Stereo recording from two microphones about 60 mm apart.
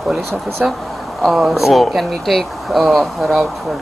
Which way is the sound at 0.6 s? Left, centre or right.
Centre.